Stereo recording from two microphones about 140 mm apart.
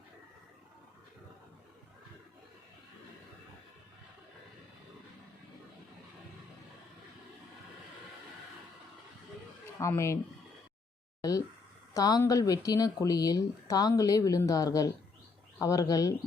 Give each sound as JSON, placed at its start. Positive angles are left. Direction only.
{"t": 9.8, "sound": "speech", "side_deg": 20}
{"t": 11.2, "sound": "a sound", "side_deg": 25}
{"t": 11.9, "sound": "speech", "side_deg": 25}